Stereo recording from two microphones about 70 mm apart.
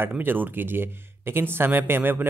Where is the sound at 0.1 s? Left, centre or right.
Right.